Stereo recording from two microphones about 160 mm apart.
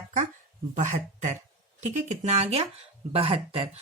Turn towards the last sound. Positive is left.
turn(degrees=-35)  # may be behind; listen again after turning